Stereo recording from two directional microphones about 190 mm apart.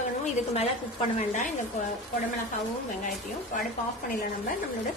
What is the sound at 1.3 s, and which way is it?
Speech, 40° left (ahead or behind).